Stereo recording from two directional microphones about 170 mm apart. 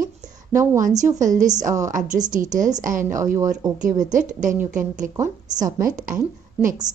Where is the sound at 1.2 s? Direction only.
45° right (ahead or behind).